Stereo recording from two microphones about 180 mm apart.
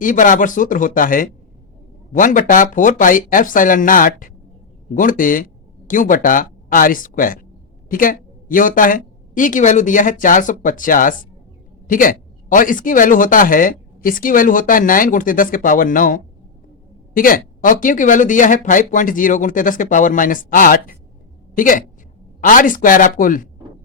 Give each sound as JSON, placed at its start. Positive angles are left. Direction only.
{"t": 0.0, "sound": "a woman's voice", "side_deg": 45}